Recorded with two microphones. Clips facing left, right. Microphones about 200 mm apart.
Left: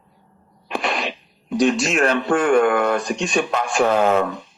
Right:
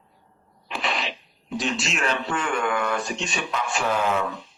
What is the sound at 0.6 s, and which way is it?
Speech, 50° left (ahead or behind).